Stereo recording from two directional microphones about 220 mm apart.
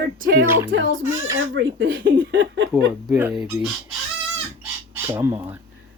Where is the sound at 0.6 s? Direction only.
60° right (ahead or behind).